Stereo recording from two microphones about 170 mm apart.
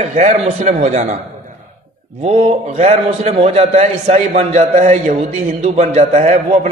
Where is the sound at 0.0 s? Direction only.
45° right (ahead or behind).